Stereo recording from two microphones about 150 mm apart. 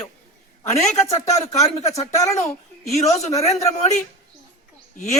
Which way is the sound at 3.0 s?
45° left (ahead or behind).